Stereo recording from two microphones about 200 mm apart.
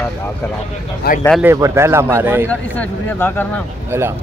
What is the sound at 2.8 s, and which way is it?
Speech, 10° left (ahead or behind).